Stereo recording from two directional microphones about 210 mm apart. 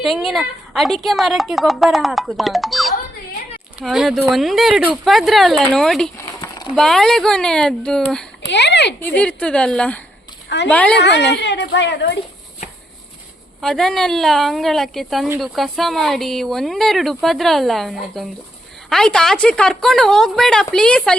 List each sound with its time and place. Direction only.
0.0 s speech: centre (ahead or behind)
6.5 s a sound: 20° left (ahead or behind)
6.7 s speech: centre (ahead or behind)
8.4 s speech: 55° left (ahead or behind)
9.0 s a woman's voice: 5° left (ahead or behind)
10.9 s speech: 55° left (ahead or behind)
13.6 s speech: centre (ahead or behind)